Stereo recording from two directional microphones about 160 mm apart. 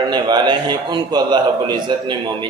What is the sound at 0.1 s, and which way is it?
A man's voice, 25° right (ahead or behind).